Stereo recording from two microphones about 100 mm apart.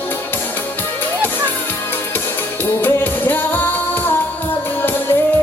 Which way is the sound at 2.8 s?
20° left (ahead or behind).